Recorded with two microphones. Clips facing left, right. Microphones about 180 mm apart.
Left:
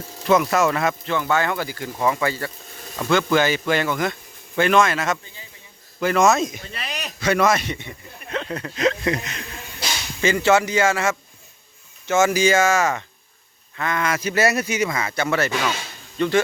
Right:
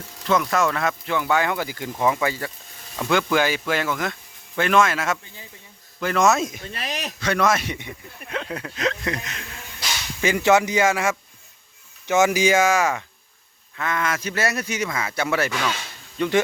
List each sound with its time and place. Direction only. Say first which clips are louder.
0.3 s speech: left 3 dB; 5° left (ahead or behind)
1.0 s speech: even; 10° right (ahead or behind)
6.7 s speech: right 3 dB; 45° right (ahead or behind)
7.2 s speech: left 3 dB; 5° left (ahead or behind)
10.2 s speech: even; 10° right (ahead or behind)